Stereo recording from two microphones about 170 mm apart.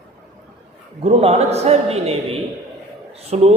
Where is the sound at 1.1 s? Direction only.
35° right (ahead or behind).